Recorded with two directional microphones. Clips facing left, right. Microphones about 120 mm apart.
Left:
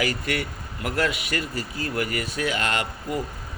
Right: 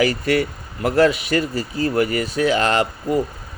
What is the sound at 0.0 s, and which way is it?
Speech, 30° right (ahead or behind).